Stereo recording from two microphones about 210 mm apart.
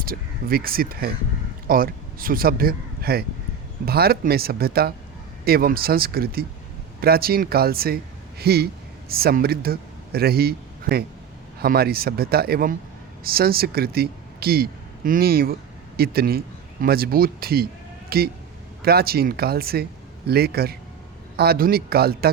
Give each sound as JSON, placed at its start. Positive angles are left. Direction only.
{"t": 0.0, "sound": "speech", "side_deg": -45}